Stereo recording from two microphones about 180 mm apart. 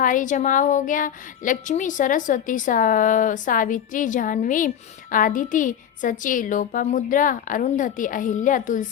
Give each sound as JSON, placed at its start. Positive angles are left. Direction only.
{"t": 0.0, "sound": "a woman's voice", "side_deg": 45}